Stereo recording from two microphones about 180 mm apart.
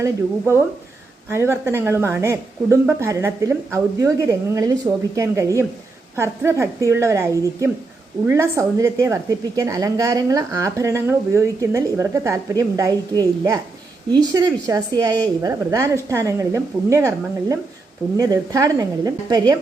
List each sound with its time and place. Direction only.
0.0 s a woman's voice: 15° right (ahead or behind)